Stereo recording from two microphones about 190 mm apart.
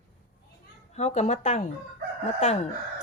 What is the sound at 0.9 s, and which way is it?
A woman's voice, 35° left (ahead or behind).